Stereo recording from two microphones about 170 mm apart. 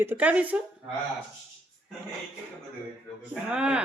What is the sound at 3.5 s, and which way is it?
Speech, 5° right (ahead or behind).